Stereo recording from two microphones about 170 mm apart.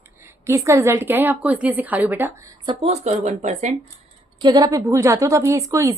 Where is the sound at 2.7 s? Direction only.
35° right (ahead or behind).